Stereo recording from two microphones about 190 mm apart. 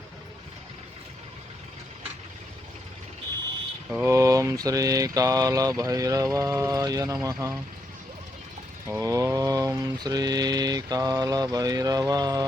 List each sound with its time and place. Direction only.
3.8 s speech: 5° right (ahead or behind)
4.1 s mantra: 15° right (ahead or behind)
8.9 s mantra: 15° right (ahead or behind)